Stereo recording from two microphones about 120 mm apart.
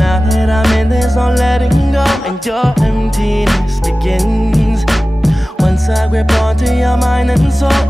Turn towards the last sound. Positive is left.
turn(degrees=0)  # may be behind; listen again after turning